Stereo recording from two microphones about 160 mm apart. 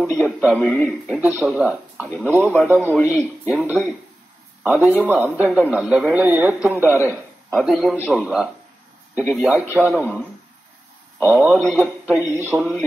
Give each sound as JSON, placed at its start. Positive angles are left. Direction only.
{"t": 0.0, "sound": "a man's voice", "side_deg": -5}
{"t": 1.1, "sound": "a man's voice", "side_deg": -10}
{"t": 2.4, "sound": "a man's voice", "side_deg": 10}
{"t": 3.1, "sound": "a man's voice", "side_deg": -10}
{"t": 6.8, "sound": "a man's voice", "side_deg": 15}
{"t": 7.5, "sound": "a man's voice", "side_deg": 0}
{"t": 9.9, "sound": "a man's voice", "side_deg": 10}
{"t": 11.3, "sound": "a man's voice", "side_deg": 0}
{"t": 12.5, "sound": "a man's voice", "side_deg": 0}